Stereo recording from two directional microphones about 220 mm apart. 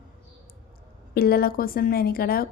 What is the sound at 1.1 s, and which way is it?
A woman's voice, 45° left (ahead or behind).